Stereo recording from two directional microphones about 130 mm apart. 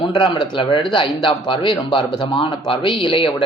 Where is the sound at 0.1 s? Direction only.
35° left (ahead or behind).